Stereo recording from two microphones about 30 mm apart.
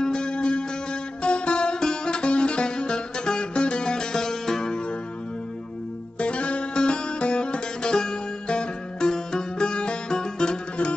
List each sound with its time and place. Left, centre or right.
0.0 s music: left
6.1 s music: left